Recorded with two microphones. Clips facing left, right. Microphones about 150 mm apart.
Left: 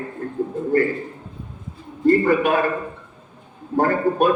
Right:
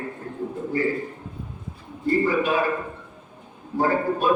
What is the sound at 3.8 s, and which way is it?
Speech, 55° left (ahead or behind).